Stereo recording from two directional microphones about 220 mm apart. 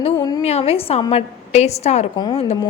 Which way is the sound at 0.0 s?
20° left (ahead or behind).